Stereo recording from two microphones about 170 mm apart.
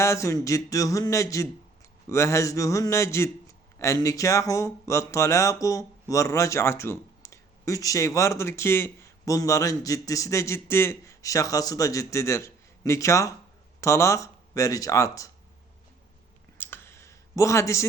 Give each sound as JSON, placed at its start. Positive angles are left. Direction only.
{"t": 0.0, "sound": "speech", "side_deg": 15}
{"t": 16.6, "sound": "clicking", "side_deg": 10}